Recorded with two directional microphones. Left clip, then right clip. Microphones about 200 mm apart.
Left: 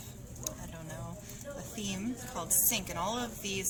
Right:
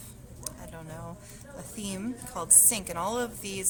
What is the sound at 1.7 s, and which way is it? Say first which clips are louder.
A woman's voice: right 3 dB; 45° right (ahead or behind).